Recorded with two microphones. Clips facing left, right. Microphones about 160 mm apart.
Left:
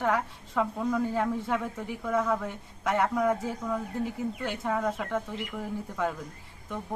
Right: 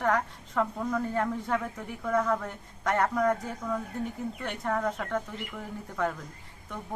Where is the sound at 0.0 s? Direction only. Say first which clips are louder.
Even; 5° left (ahead or behind).